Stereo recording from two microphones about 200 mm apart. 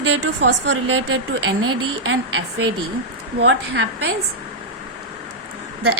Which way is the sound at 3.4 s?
60° right (ahead or behind).